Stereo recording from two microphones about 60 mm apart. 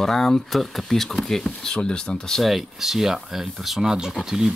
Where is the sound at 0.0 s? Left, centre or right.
Centre.